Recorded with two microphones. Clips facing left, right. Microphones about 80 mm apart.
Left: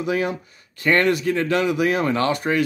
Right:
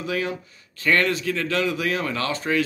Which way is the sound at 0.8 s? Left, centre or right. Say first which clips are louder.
Left 3 dB; left.